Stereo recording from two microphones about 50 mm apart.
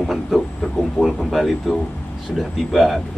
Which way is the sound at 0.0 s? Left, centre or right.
Centre.